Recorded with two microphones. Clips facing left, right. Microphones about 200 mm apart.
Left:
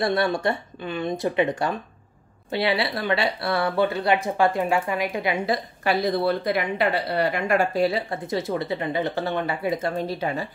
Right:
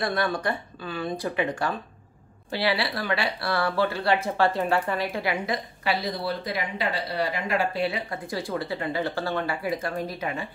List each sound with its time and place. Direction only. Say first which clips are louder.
0.0 s speech: left 4 dB; 25° left (ahead or behind)
5.9 s speech: left 6 dB; 55° left (ahead or behind)
8.1 s speech: left 4 dB; 20° left (ahead or behind)